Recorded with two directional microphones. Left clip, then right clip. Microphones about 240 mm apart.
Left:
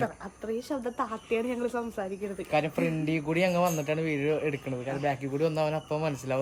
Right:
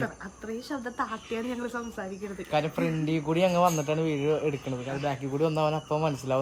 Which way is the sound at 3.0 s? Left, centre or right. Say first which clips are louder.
Right 1 dB; left.